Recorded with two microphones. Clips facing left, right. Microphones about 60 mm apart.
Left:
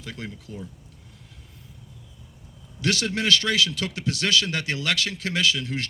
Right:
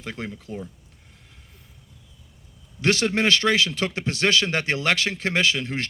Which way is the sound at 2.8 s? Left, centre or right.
Right.